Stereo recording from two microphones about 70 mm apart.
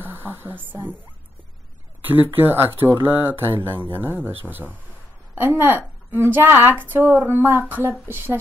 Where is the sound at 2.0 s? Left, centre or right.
Right.